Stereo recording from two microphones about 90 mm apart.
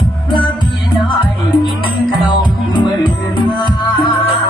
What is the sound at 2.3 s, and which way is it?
Music, 60° left (ahead or behind).